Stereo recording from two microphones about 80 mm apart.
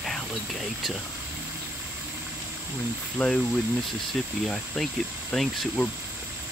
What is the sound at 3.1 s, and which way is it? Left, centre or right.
Speech, centre.